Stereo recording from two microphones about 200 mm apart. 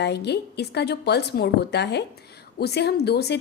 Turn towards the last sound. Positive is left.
turn(degrees=55)  # may be behind; listen again after turning